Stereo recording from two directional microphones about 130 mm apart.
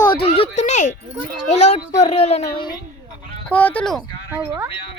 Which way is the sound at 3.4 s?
10° left (ahead or behind).